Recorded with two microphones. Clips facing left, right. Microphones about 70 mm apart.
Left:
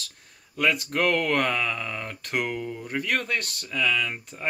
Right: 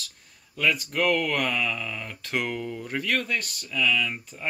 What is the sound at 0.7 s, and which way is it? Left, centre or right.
Speech, left.